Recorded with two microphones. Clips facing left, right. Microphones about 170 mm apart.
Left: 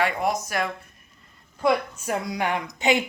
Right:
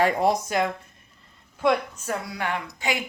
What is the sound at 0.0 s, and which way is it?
Speech, 35° right (ahead or behind).